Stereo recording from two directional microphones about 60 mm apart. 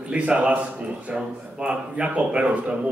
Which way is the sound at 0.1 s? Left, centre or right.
Right.